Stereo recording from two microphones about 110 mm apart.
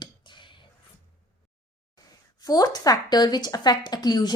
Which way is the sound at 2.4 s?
35° left (ahead or behind).